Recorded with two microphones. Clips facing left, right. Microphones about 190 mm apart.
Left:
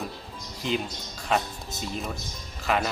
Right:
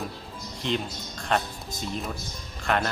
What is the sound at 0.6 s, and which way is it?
Speech, centre (ahead or behind).